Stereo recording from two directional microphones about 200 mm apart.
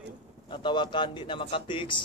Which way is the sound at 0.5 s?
25° left (ahead or behind).